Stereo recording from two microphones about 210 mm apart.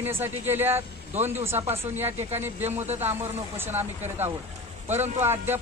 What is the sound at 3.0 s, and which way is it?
A man's voice, 10° right (ahead or behind).